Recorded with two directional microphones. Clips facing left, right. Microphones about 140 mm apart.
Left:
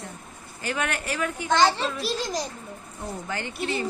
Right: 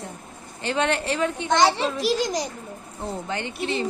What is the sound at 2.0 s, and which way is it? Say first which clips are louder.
Speech: right 6 dB; 90° right.